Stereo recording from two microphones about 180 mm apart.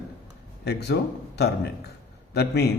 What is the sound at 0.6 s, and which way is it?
A man's voice, 65° left (ahead or behind).